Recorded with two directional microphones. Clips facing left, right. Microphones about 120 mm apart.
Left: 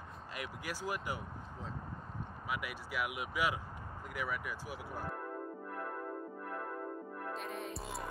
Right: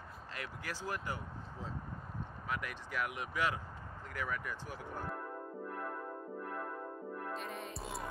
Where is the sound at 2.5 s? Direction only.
10° left (ahead or behind).